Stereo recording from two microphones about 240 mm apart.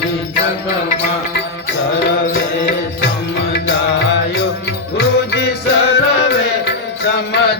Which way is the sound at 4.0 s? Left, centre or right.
Left.